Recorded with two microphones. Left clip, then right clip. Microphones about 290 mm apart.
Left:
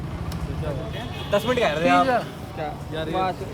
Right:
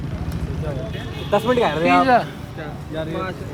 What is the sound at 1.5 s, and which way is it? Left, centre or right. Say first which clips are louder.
Speech: right 4 dB; centre.